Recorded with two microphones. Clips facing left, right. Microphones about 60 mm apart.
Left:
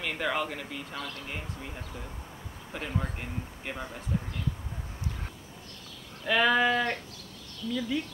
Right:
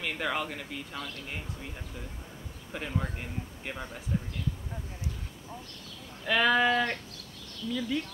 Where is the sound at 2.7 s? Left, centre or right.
Centre.